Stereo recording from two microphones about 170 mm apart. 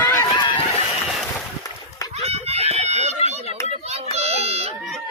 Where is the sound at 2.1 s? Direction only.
35° right (ahead or behind).